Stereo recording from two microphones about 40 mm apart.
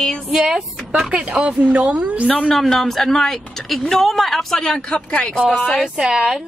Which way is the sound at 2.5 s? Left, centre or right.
Centre.